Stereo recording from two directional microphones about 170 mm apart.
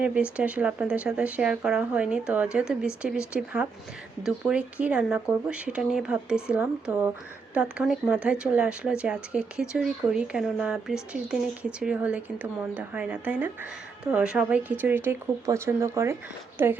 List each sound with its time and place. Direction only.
0.0 s speech: 5° right (ahead or behind)